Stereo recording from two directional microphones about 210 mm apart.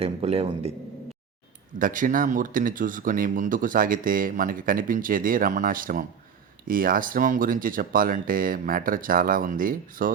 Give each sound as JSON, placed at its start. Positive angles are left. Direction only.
{"t": 0.0, "sound": "a man's voice", "side_deg": -30}
{"t": 1.8, "sound": "speech", "side_deg": -40}